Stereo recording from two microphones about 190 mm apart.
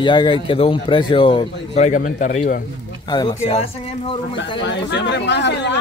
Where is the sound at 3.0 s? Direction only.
25° left (ahead or behind).